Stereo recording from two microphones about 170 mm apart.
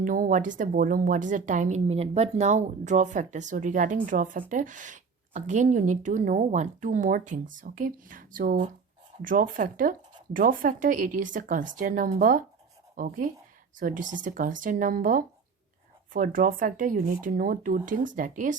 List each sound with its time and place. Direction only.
0.0 s a woman's voice: 50° right (ahead or behind)